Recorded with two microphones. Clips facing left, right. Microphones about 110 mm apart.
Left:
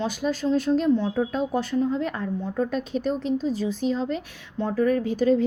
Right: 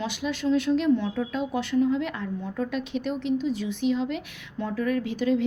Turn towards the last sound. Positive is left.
turn(degrees=40)  # may be behind; listen again after turning